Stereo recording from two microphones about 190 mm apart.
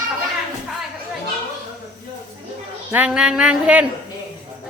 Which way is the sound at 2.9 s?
5° right (ahead or behind).